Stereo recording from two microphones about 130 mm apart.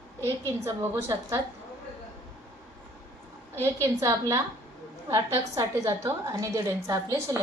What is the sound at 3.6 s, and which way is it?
A woman's voice, 20° right (ahead or behind).